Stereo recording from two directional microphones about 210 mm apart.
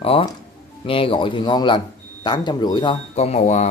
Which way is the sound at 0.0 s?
25° left (ahead or behind).